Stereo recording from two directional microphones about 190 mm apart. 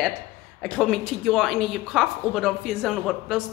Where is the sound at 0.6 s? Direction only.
Centre (ahead or behind).